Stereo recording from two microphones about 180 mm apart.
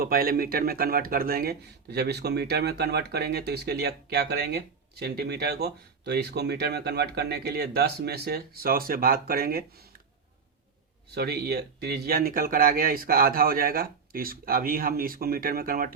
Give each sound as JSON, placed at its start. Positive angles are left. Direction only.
{"t": 0.0, "sound": "speech", "side_deg": -55}
{"t": 11.1, "sound": "speech", "side_deg": -60}